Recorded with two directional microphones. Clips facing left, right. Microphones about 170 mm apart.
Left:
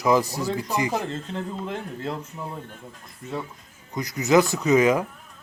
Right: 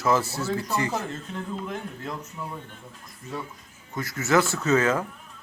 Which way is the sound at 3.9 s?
15° left (ahead or behind).